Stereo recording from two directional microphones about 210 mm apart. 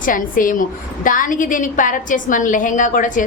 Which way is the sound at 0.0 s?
40° left (ahead or behind).